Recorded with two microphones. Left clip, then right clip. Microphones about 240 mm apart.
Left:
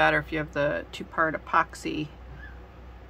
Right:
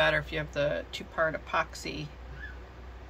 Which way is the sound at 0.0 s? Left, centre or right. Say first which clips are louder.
Left 4 dB; centre.